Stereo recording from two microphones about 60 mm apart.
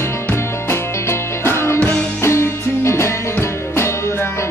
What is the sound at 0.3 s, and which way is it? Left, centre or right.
Music, left.